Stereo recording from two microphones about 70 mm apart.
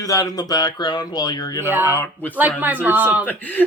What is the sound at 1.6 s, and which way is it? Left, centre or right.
Speech, right.